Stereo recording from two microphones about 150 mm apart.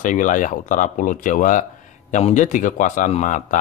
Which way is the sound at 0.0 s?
60° left (ahead or behind).